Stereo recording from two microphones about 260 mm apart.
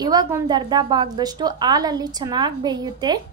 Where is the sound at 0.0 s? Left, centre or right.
Centre.